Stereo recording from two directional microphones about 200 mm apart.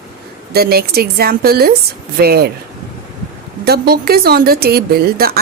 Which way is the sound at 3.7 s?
50° right (ahead or behind).